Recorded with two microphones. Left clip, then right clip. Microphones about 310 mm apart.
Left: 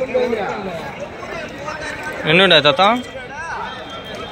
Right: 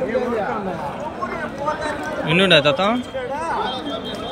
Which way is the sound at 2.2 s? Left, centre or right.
Centre.